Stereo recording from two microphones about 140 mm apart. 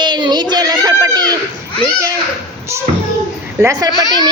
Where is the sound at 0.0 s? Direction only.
30° right (ahead or behind).